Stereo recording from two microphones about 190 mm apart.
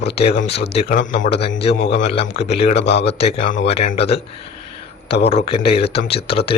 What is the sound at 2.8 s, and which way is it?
Speech, 65° left (ahead or behind).